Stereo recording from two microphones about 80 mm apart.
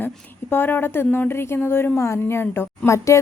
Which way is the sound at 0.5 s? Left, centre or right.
Left.